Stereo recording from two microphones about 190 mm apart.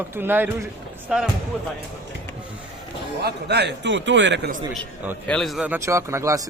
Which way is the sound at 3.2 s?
60° right (ahead or behind).